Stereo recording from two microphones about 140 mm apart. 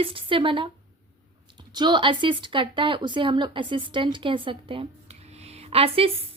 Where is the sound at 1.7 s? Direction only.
30° right (ahead or behind).